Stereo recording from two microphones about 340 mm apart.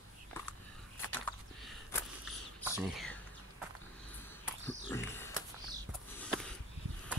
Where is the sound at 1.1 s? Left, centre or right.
Centre.